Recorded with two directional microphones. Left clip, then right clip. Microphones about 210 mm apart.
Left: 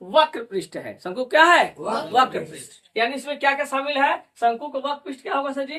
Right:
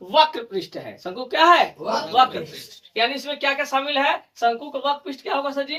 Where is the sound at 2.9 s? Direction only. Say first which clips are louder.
Right 1 dB; 15° left (ahead or behind).